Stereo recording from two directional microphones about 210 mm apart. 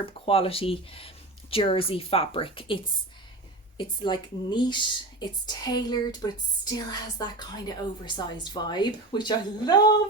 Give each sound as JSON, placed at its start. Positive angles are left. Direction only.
{"t": 0.0, "sound": "speech", "side_deg": 25}
{"t": 3.8, "sound": "speech", "side_deg": 20}